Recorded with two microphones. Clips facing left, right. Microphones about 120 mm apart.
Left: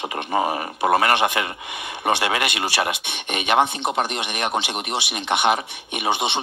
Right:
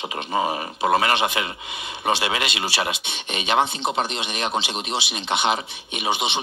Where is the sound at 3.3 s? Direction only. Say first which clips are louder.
Left 2 dB; 25° right (ahead or behind).